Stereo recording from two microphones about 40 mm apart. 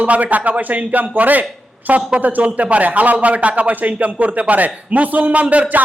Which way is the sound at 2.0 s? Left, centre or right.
Right.